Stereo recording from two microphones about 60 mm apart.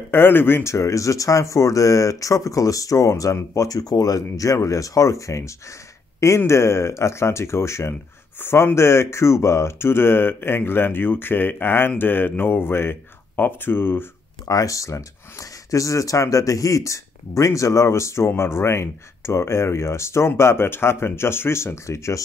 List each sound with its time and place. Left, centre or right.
0.1 s speech: left
0.7 s speech: left
8.4 s speech: left
14.5 s speech: left